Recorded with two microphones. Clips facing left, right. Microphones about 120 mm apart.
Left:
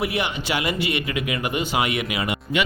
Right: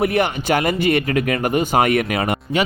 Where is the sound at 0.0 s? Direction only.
50° right (ahead or behind).